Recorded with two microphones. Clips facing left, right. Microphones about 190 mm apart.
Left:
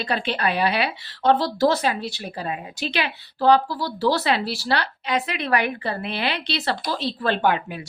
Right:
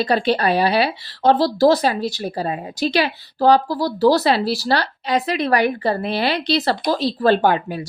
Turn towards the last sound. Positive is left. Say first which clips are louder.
# right 4 dB
turn(degrees=-35)  # may be behind; listen again after turning